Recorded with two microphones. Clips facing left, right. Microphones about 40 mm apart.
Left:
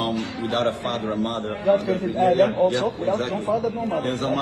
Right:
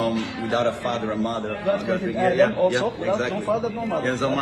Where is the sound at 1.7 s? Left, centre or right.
Right.